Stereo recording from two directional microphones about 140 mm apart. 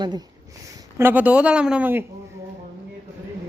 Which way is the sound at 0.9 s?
15° right (ahead or behind).